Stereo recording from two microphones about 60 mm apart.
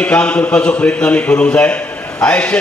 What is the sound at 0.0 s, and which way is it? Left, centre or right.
Speech, left.